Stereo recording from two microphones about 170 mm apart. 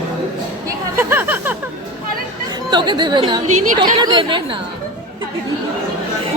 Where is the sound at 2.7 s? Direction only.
25° right (ahead or behind).